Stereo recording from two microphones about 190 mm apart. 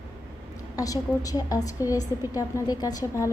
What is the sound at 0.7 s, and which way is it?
A woman's voice, 20° left (ahead or behind).